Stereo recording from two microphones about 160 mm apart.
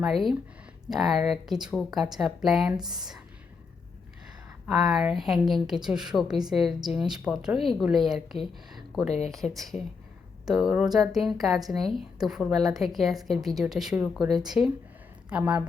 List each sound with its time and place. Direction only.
0.0 s a woman's voice: centre (ahead or behind)
4.7 s a woman's voice: centre (ahead or behind)
9.0 s speech: 40° left (ahead or behind)
9.3 s a woman's voice: centre (ahead or behind)